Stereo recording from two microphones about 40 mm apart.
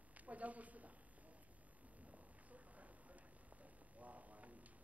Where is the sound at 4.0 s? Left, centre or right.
Right.